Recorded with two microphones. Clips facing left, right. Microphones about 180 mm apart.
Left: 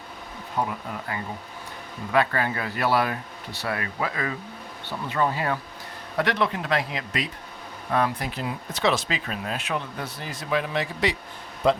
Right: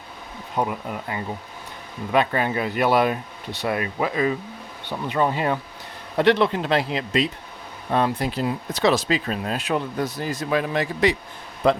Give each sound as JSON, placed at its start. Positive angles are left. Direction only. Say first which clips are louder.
{"t": 0.5, "sound": "speech", "louder": "right 3 dB", "side_deg": -20}